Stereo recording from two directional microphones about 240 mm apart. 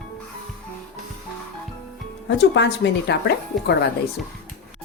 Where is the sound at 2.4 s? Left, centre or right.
Left.